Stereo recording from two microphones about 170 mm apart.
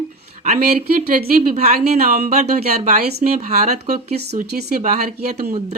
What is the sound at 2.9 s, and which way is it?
Speech, 60° right (ahead or behind).